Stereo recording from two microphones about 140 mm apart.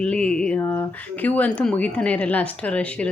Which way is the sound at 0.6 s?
20° left (ahead or behind).